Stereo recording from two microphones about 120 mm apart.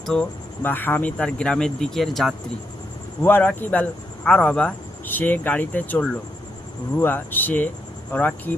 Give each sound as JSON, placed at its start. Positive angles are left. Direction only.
{"t": 0.0, "sound": "speech", "side_deg": 5}
{"t": 0.6, "sound": "speech", "side_deg": 15}
{"t": 3.2, "sound": "speech", "side_deg": 15}